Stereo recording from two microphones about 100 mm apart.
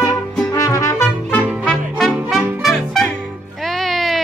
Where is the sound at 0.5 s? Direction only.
35° left (ahead or behind).